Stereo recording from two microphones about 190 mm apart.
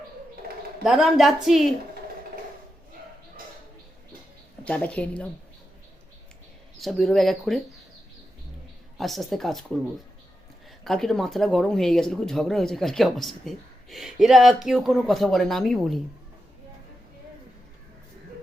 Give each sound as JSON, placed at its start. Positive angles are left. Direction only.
{"t": 0.9, "sound": "speech", "side_deg": 0}
{"t": 4.6, "sound": "a woman's voice", "side_deg": 5}
{"t": 6.7, "sound": "speech", "side_deg": 0}
{"t": 9.0, "sound": "speech", "side_deg": 0}
{"t": 10.8, "sound": "speech", "side_deg": 0}